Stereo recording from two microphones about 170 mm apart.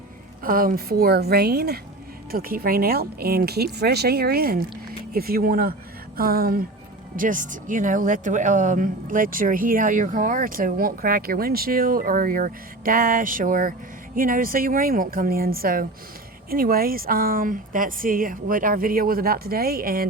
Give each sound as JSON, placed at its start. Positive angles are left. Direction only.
{"t": 0.4, "sound": "speech", "side_deg": -55}